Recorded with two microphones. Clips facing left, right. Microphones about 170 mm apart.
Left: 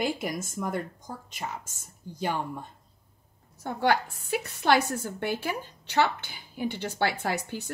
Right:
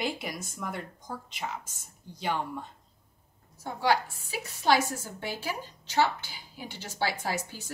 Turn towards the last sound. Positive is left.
turn(degrees=60)  # may be behind; listen again after turning